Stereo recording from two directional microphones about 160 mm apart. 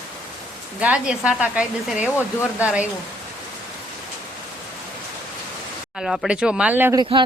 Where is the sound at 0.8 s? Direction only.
5° right (ahead or behind).